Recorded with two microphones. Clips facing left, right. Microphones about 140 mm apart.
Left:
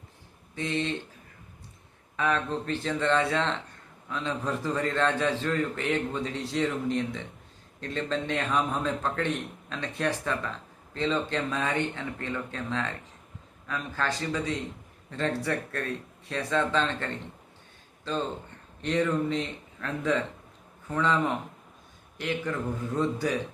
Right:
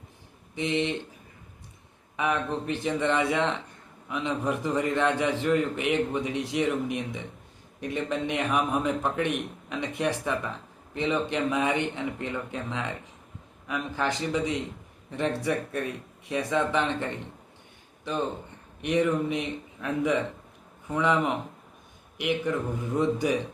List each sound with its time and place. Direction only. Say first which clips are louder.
0.5 s a man's voice: right 3 dB; 15° right (ahead or behind)
2.1 s a man's voice: even; 15° right (ahead or behind)